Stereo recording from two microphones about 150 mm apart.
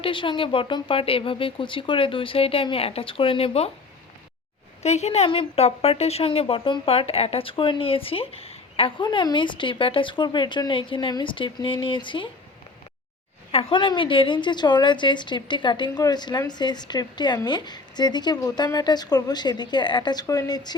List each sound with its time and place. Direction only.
0.0 s a woman's voice: 35° left (ahead or behind)
4.8 s a woman's voice: 45° left (ahead or behind)
13.5 s a woman's voice: 40° left (ahead or behind)